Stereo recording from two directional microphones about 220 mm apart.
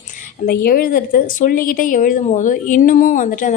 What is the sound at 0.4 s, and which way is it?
A woman's voice, 45° left (ahead or behind).